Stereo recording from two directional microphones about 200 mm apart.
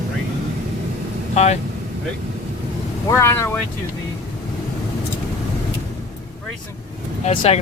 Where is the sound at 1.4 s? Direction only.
35° left (ahead or behind).